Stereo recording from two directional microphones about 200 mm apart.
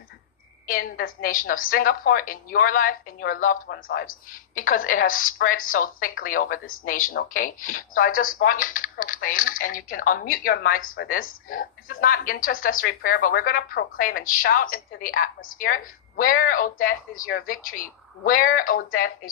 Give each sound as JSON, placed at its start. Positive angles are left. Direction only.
{"t": 0.7, "sound": "a woman's voice", "side_deg": 45}